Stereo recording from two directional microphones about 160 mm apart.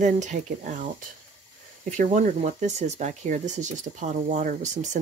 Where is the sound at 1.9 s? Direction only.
45° right (ahead or behind).